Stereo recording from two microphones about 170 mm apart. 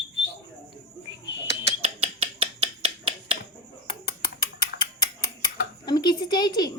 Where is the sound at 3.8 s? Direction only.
25° left (ahead or behind).